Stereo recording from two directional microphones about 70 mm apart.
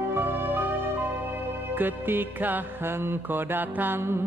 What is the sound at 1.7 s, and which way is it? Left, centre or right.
Music, right.